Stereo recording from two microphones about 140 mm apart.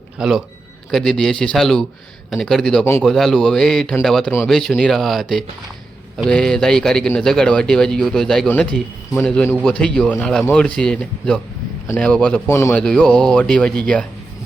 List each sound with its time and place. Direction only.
0.2 s a man's voice: 5° right (ahead or behind)
2.8 s speech: 15° left (ahead or behind)
3.1 s a man's voice: centre (ahead or behind)
12.5 s speech: 20° left (ahead or behind)
12.7 s speech: 5° left (ahead or behind)